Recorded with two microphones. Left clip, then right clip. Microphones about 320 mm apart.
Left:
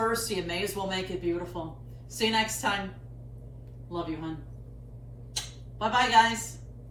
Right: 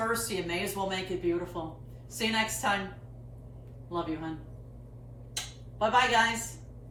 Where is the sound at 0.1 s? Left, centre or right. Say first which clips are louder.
Left 1 dB; centre.